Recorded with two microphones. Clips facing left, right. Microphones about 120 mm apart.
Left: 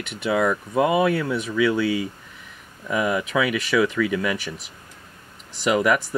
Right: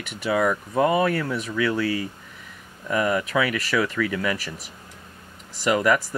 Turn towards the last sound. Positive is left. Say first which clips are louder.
# left 1 dB
turn(degrees=5)  # may be behind; listen again after turning